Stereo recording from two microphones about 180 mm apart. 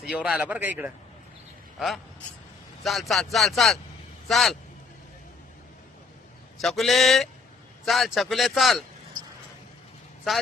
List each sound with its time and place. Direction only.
0.0 s a man's voice: 5° right (ahead or behind)
6.6 s a man's voice: centre (ahead or behind)